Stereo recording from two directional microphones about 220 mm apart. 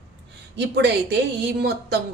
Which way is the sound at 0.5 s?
50° right (ahead or behind).